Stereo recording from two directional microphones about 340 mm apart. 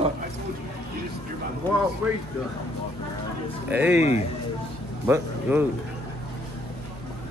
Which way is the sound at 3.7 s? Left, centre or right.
Centre.